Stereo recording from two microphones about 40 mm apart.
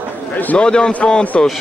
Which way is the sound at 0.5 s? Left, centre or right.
Left.